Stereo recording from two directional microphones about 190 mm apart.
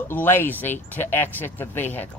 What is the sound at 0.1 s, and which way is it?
Speech, 10° left (ahead or behind).